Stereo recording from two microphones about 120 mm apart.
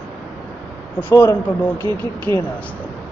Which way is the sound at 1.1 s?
25° left (ahead or behind).